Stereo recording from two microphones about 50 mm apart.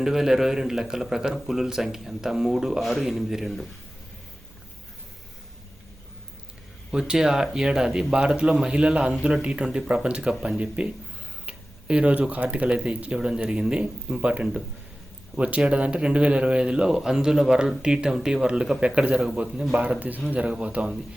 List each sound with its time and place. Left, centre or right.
0.0 s a man's voice: centre
7.1 s a man's voice: centre
19.7 s speech: right